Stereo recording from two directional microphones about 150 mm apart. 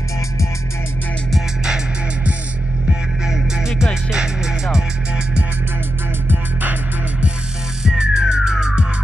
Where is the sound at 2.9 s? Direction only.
5° right (ahead or behind).